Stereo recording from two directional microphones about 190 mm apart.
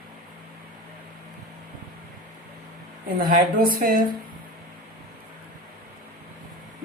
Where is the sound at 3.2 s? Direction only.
50° right (ahead or behind).